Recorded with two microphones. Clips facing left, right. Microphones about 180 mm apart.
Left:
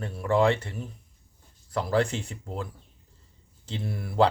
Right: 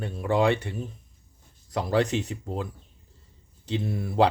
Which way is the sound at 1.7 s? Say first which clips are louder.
Right 1 dB; 20° right (ahead or behind).